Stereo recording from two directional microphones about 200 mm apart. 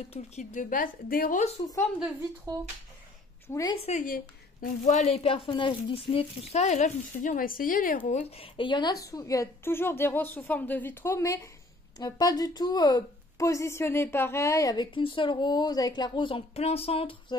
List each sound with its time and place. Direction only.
0.1 s a woman's voice: 35° left (ahead or behind)
3.4 s speech: 15° left (ahead or behind)
3.8 s a woman's voice: 40° left (ahead or behind)
8.1 s a woman's voice: 30° left (ahead or behind)